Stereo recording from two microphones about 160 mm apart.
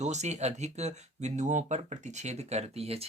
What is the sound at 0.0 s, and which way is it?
Speech, 45° right (ahead or behind).